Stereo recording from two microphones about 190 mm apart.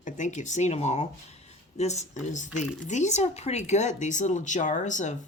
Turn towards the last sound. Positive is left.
turn(degrees=40)  # may be behind; listen again after turning